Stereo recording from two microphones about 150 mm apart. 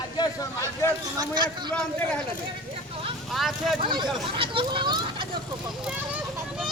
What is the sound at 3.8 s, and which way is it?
A child's voice, 30° right (ahead or behind).